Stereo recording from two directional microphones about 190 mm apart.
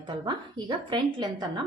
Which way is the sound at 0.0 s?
25° right (ahead or behind).